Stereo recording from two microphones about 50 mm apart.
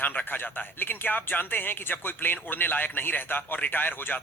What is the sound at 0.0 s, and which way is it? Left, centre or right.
Speech, left.